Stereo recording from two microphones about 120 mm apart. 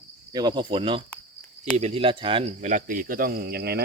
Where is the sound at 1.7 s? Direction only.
60° right (ahead or behind).